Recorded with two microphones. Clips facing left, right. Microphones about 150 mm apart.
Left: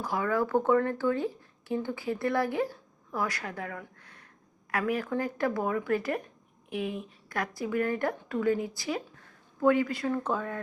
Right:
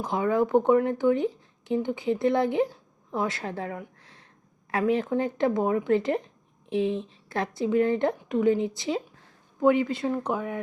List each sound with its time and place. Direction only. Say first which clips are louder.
0.0 s speech: right 4 dB; 20° right (ahead or behind)